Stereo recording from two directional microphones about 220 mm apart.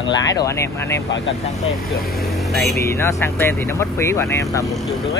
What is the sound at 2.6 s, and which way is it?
Speech, 15° left (ahead or behind).